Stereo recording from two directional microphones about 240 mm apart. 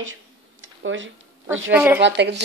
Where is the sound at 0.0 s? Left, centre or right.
Right.